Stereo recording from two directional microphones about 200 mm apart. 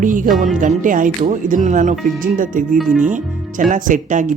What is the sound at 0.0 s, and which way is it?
Speech, 40° right (ahead or behind).